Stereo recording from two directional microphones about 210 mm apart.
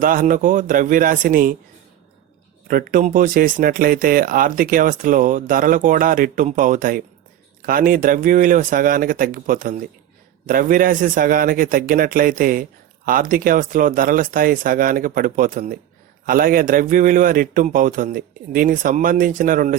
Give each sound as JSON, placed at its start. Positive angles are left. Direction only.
{"t": 0.0, "sound": "speech", "side_deg": -40}
{"t": 2.6, "sound": "speech", "side_deg": -45}